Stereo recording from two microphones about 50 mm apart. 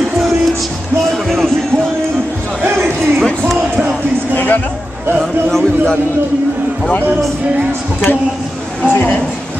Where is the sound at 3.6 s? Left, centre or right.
Right.